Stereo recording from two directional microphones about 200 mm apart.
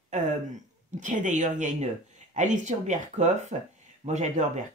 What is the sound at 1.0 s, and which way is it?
Speech, 40° right (ahead or behind).